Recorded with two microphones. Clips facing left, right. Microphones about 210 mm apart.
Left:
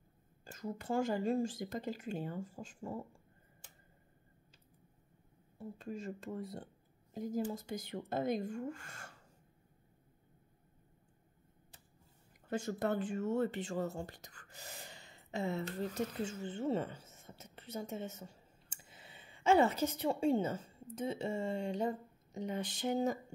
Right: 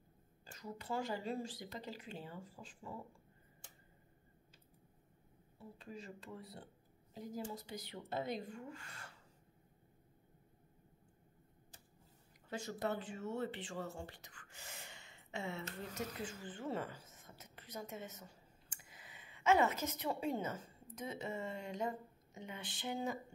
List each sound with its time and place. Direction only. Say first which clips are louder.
0.5 s speech: left 6 dB; 50° left (ahead or behind)
5.6 s speech: left 7 dB; 45° left (ahead or behind)
12.4 s speech: left 5 dB; 50° left (ahead or behind)